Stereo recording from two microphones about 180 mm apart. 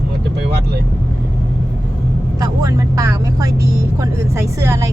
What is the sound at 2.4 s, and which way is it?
Vehicle, 20° right (ahead or behind).